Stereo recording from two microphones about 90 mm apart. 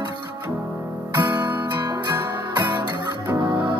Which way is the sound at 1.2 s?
20° right (ahead or behind).